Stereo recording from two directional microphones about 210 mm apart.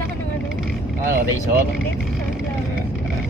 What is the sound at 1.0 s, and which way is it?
Speech, 45° right (ahead or behind).